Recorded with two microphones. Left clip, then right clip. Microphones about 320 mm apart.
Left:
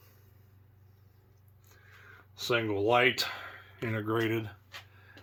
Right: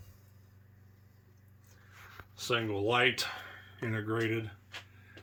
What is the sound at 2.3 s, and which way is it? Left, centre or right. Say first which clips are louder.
Speech: left 3 dB; centre.